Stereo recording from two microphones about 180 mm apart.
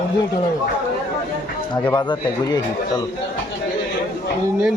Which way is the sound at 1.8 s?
25° left (ahead or behind).